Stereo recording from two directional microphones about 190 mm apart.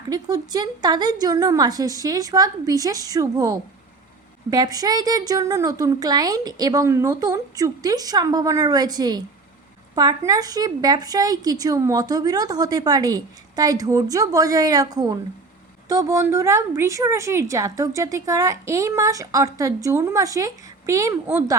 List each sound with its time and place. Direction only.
0.1 s a woman's voice: 20° right (ahead or behind)